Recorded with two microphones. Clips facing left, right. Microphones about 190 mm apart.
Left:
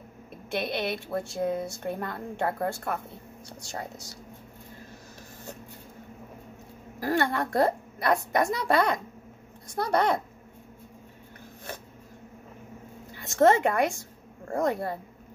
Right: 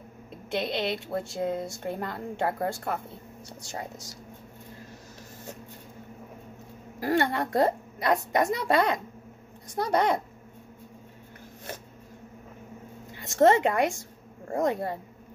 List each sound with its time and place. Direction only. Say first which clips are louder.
0.5 s speech: right 1 dB; 20° right (ahead or behind)
7.0 s speech: right 1 dB; 20° right (ahead or behind)
13.4 s speech: even; 20° right (ahead or behind)